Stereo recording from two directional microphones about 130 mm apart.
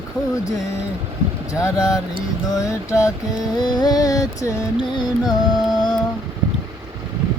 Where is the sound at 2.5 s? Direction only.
25° left (ahead or behind).